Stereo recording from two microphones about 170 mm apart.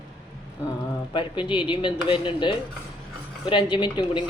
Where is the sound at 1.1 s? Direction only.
30° left (ahead or behind).